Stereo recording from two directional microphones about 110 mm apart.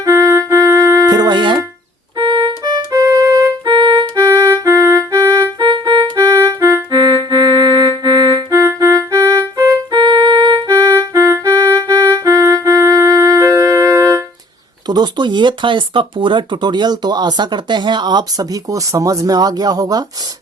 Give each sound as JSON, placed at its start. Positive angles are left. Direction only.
{"t": 0.0, "sound": "music", "side_deg": -30}
{"t": 3.7, "sound": "music", "side_deg": -45}
{"t": 4.2, "sound": "music", "side_deg": -25}
{"t": 5.5, "sound": "music", "side_deg": -45}
{"t": 6.1, "sound": "music", "side_deg": -30}
{"t": 9.9, "sound": "music", "side_deg": -40}
{"t": 10.7, "sound": "music", "side_deg": -30}
{"t": 14.8, "sound": "speech", "side_deg": -40}